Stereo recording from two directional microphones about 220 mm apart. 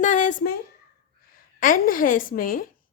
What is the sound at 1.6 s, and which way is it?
A woman's voice, 40° left (ahead or behind).